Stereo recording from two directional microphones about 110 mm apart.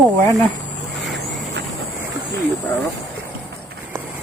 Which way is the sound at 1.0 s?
Centre (ahead or behind).